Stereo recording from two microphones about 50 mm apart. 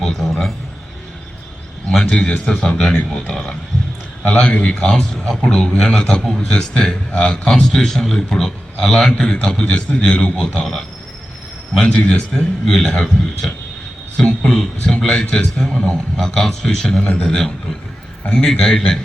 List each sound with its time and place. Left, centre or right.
0.0 s a man's voice: centre
1.9 s a man's voice: centre
6.2 s a man's voice: centre; by 12.5 s left
12.6 s a man's voice: centre
17.0 s speech: left
17.2 s a man's voice: centre